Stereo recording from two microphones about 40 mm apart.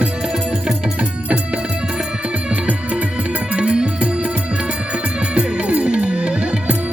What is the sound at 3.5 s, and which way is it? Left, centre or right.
Music, right.